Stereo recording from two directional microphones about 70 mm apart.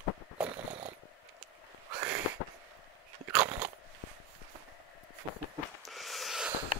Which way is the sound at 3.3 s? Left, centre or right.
Centre.